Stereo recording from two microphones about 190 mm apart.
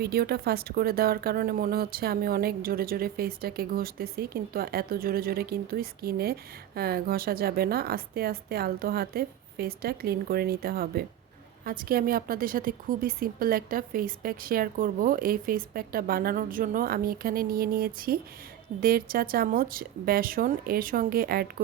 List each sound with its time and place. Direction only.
0.0 s speech: 55° right (ahead or behind)